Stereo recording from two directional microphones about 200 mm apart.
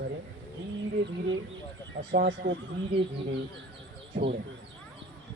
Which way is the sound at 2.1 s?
60° right (ahead or behind).